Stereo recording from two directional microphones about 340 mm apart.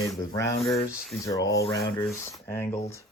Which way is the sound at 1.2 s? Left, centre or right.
Centre.